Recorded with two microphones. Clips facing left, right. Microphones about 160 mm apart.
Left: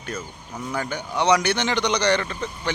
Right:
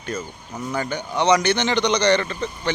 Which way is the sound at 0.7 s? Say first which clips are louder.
Right 2 dB; 5° left (ahead or behind).